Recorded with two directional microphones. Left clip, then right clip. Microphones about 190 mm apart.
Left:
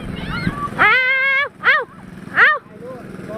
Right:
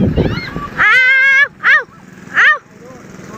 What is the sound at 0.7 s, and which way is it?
Music, 5° left (ahead or behind).